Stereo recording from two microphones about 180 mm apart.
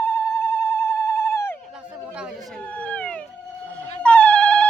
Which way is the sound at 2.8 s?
5° left (ahead or behind).